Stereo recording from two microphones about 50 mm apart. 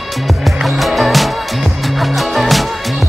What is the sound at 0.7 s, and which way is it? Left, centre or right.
Music, centre.